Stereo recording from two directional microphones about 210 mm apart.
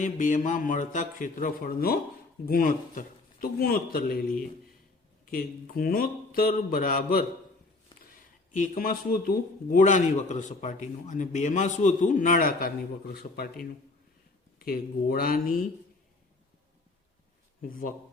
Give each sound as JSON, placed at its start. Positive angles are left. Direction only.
{"t": 0.0, "sound": "a man's voice", "side_deg": 35}
{"t": 5.2, "sound": "speech", "side_deg": 40}
{"t": 8.5, "sound": "a man's voice", "side_deg": 40}
{"t": 14.6, "sound": "speech", "side_deg": 45}
{"t": 17.6, "sound": "a man's voice", "side_deg": 40}